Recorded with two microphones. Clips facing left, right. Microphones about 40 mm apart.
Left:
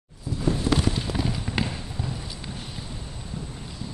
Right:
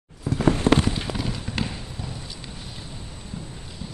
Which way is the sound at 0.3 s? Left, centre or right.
Right.